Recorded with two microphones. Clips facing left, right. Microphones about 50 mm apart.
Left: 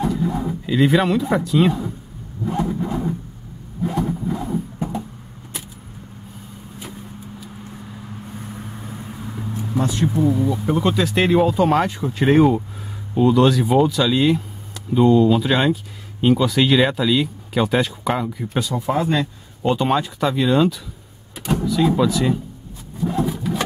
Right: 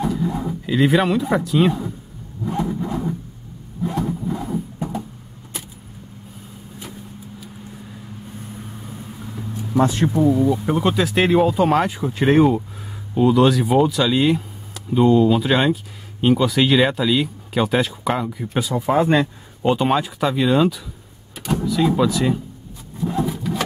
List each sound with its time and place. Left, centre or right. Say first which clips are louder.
0.0 s a sound: left 1 dB; centre
0.7 s speech: even; centre
2.7 s a sound: left 1 dB; centre
3.8 s vehicle: left 1 dB; centre
9.8 s speech: right 4 dB; right
10.5 s speech: even; centre
18.9 s speech: right 5 dB; right
19.7 s speech: right 1 dB; centre
22.9 s vehicle: left 1 dB; centre